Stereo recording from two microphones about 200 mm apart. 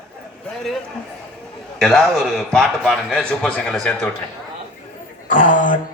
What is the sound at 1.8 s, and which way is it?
A man's voice, centre (ahead or behind).